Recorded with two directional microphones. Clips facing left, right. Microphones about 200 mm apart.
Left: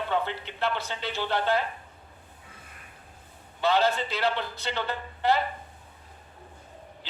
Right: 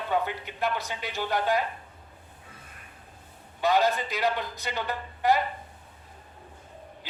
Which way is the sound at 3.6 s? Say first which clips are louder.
Even; 15° right (ahead or behind).